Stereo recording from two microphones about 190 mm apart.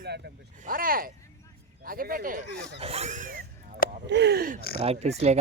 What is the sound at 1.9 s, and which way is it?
Speech, 50° right (ahead or behind).